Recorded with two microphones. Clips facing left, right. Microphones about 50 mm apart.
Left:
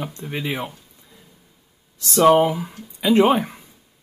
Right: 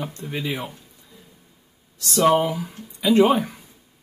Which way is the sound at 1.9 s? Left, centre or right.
Left.